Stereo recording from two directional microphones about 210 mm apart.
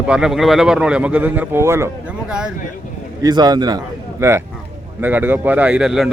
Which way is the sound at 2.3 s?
5° right (ahead or behind).